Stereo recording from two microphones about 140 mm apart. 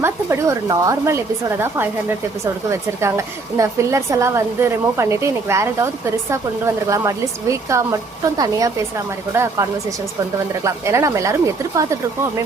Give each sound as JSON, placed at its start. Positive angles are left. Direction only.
{"t": 0.0, "sound": "speech", "side_deg": -20}